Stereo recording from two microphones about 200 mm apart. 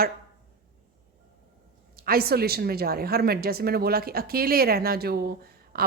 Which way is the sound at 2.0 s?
50° right (ahead or behind).